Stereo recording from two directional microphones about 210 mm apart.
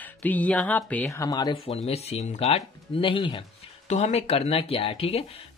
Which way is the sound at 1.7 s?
30° left (ahead or behind).